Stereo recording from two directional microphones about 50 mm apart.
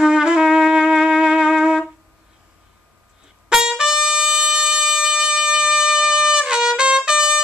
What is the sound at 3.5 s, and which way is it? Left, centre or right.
Trumpet, centre.